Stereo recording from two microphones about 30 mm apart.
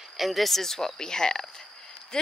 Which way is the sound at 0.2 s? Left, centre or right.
Centre.